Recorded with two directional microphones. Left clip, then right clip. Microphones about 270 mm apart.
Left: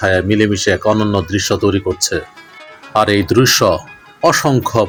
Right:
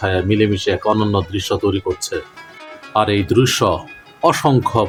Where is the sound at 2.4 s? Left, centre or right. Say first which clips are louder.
Even; centre.